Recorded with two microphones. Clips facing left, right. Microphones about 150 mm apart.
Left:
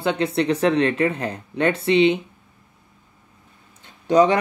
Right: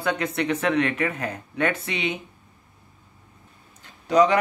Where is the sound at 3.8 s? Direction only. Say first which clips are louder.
Left 2 dB; 30° left (ahead or behind).